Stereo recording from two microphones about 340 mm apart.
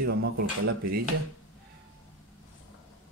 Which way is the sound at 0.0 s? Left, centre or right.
Right.